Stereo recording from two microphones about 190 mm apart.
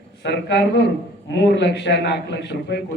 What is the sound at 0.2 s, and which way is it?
A man's voice, 65° left (ahead or behind).